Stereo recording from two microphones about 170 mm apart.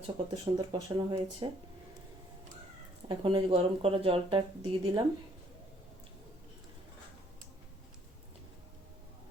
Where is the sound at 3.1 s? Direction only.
30° right (ahead or behind).